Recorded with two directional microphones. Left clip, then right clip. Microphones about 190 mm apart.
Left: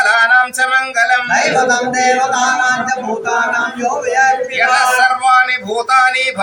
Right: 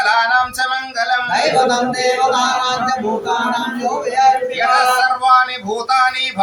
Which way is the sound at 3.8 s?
30° left (ahead or behind).